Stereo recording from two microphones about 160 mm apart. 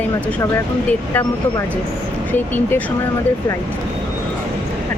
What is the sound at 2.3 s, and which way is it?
Speech, 10° left (ahead or behind).